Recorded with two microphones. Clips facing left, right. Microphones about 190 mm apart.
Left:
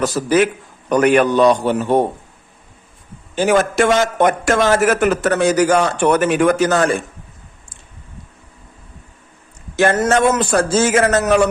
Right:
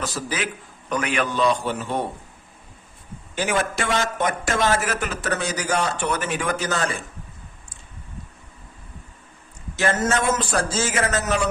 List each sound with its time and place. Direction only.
0.0 s a man's voice: 65° left (ahead or behind)
0.9 s a man's voice: 50° left (ahead or behind)
3.3 s a man's voice: 45° left (ahead or behind)
3.9 s a man's voice: 65° left (ahead or behind)
9.7 s a man's voice: 65° left (ahead or behind)